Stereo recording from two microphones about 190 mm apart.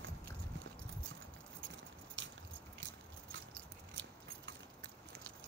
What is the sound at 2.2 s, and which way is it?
Keys jangling, 80° right.